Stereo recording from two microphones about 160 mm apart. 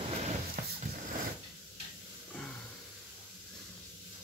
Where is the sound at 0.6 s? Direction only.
60° right (ahead or behind).